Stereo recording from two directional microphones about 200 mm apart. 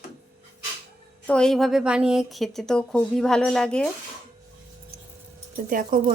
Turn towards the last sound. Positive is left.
turn(degrees=-45)  # may be behind; listen again after turning